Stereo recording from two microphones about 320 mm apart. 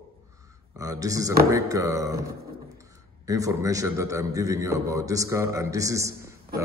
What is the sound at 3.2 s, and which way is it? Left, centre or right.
A man's voice, centre.